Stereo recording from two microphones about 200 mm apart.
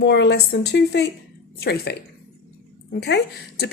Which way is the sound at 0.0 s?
60° left (ahead or behind).